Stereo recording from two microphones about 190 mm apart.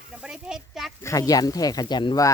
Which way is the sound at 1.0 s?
15° left (ahead or behind).